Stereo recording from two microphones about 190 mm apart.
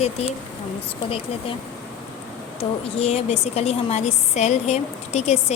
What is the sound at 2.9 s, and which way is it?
A woman's voice, 35° left (ahead or behind).